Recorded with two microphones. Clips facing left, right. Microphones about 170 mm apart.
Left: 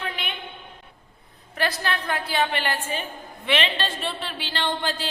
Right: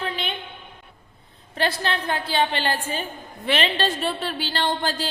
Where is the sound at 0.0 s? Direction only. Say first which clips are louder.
Right 4 dB; 30° right (ahead or behind).